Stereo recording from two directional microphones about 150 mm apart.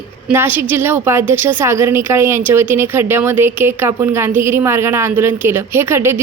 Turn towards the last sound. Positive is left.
turn(degrees=-15)  # may be behind; listen again after turning